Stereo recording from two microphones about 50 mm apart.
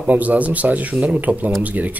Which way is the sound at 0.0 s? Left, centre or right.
Right.